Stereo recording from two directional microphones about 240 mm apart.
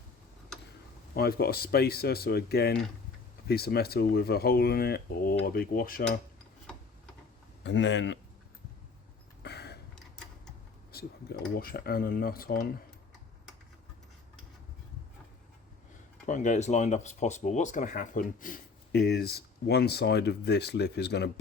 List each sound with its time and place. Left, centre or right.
1.1 s speech: left
7.6 s speech: left
9.4 s a sound: left
10.9 s speech: left
16.2 s speech: left